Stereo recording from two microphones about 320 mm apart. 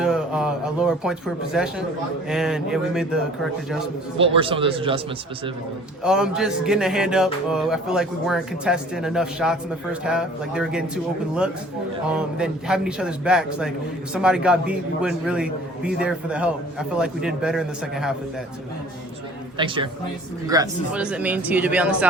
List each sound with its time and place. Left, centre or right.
0.0 s a man's voice: centre
4.2 s speech: centre
6.0 s a man's voice: centre
19.5 s a man's voice: centre